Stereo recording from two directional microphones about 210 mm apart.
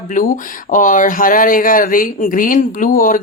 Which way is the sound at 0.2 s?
40° left (ahead or behind).